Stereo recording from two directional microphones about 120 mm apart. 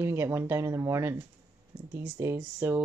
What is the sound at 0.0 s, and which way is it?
Speech, 20° right (ahead or behind).